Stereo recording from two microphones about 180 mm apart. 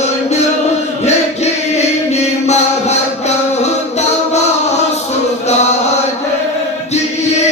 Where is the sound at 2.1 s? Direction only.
40° left (ahead or behind).